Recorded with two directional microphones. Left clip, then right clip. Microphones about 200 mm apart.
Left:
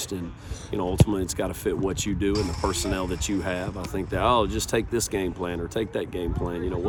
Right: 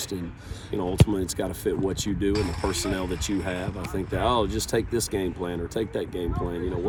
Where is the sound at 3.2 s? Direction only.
Centre (ahead or behind).